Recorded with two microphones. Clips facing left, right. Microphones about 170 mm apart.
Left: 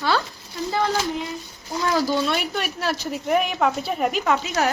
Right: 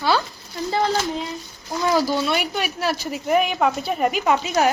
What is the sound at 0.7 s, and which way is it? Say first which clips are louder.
Child singing: right 2 dB; 25° right (ahead or behind).